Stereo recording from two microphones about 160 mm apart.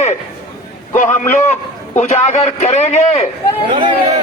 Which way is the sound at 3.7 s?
35° right (ahead or behind).